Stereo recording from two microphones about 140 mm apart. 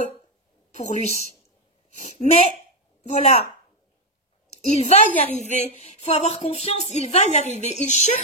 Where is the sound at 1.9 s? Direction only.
50° left (ahead or behind).